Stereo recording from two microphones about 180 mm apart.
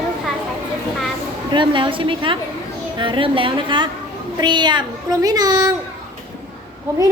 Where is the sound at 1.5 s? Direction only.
25° right (ahead or behind).